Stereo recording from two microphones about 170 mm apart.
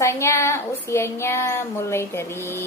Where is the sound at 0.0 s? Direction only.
15° left (ahead or behind).